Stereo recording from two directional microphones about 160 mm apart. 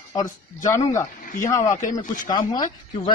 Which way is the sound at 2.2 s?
25° left (ahead or behind).